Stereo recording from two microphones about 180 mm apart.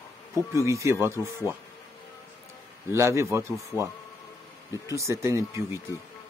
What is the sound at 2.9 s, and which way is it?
Speech, 15° right (ahead or behind).